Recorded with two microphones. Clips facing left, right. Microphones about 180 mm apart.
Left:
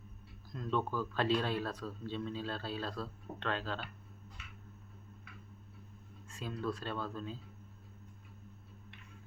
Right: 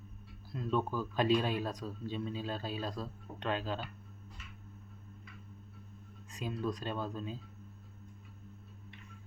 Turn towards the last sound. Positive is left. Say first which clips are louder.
# right 2 dB
turn(degrees=-15)  # may be behind; listen again after turning